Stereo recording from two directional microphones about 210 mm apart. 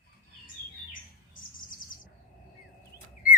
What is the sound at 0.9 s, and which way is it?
Bird, 40° left (ahead or behind).